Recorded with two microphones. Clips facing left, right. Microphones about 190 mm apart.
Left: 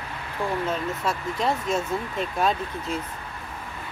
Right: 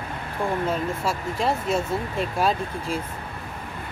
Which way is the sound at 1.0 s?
5° right (ahead or behind).